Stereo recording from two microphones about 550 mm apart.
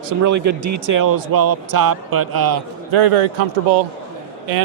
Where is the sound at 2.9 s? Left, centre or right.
Right.